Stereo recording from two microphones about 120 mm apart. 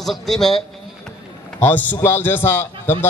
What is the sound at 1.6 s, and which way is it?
A man's voice, 15° left (ahead or behind).